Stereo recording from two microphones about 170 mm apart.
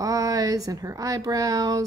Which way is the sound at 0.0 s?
20° right (ahead or behind).